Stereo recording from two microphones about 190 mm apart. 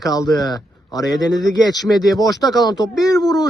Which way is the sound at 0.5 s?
20° left (ahead or behind).